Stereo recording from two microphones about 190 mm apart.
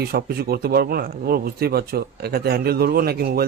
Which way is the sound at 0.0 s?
55° right (ahead or behind).